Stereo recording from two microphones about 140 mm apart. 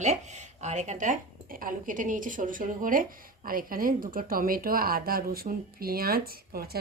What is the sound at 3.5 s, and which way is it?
Speech, 90° right.